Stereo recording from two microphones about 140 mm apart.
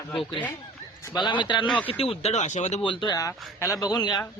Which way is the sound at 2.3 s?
55° left (ahead or behind).